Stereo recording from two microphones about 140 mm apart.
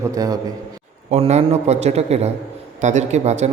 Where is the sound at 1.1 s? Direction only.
50° right (ahead or behind).